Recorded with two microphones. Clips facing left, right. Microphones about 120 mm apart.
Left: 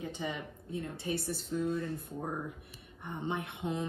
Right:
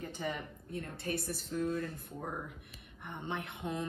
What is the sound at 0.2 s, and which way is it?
Speech, 5° left (ahead or behind).